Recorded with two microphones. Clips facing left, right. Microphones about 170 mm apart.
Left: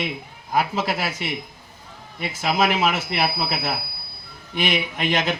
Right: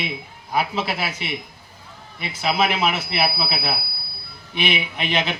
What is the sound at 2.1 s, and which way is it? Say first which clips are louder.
Speech: even; 45° left (ahead or behind).